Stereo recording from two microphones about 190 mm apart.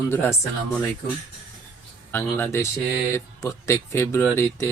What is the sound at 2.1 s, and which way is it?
Speech, 10° left (ahead or behind).